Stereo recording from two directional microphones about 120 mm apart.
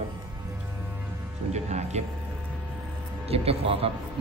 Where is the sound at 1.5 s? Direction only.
70° right (ahead or behind).